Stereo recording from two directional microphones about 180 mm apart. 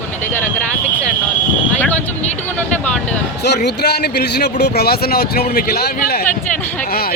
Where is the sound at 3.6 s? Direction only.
65° left (ahead or behind).